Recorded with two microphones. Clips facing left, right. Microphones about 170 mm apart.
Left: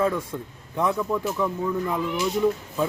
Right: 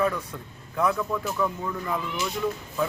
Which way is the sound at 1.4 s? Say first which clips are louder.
Right 1 dB; 20° left (ahead or behind).